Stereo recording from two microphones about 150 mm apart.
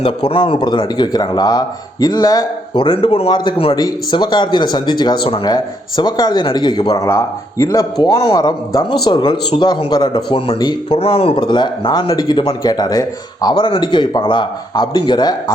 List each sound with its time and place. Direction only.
0.0 s speech: 35° left (ahead or behind)